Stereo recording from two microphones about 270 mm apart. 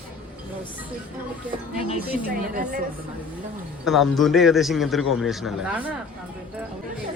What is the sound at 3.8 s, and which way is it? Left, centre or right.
Speech, centre.